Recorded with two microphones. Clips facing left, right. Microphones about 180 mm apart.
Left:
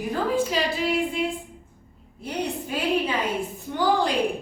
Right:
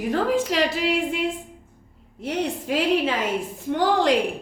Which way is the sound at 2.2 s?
90° right.